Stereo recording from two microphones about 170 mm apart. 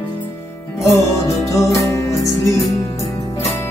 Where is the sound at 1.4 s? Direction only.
20° left (ahead or behind).